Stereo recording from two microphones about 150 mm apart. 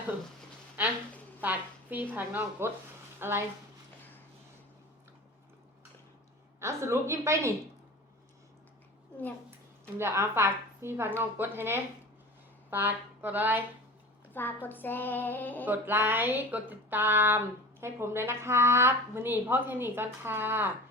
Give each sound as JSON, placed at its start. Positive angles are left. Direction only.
{"t": 0.8, "sound": "speech", "side_deg": -10}
{"t": 6.6, "sound": "speech", "side_deg": -15}
{"t": 10.0, "sound": "speech", "side_deg": -15}
{"t": 14.3, "sound": "speech", "side_deg": 15}
{"t": 15.6, "sound": "speech", "side_deg": -15}